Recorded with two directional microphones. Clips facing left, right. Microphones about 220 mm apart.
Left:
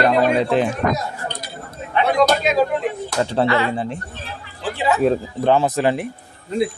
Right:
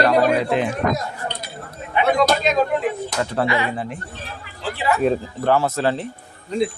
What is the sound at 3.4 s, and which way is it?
Speech, 15° right (ahead or behind).